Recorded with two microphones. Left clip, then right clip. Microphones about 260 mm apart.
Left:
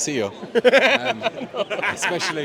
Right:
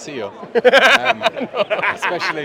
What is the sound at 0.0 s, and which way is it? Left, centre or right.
Speech, left.